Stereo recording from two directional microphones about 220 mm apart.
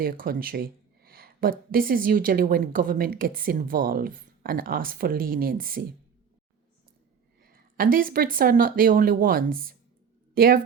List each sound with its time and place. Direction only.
0.0 s speech: 40° right (ahead or behind)
7.4 s a woman's voice: 40° right (ahead or behind)